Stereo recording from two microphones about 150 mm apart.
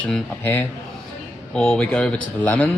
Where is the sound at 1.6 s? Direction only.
5° left (ahead or behind).